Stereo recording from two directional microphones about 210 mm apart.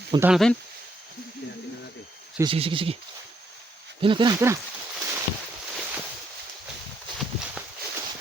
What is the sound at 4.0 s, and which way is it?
Speech, 20° right (ahead or behind).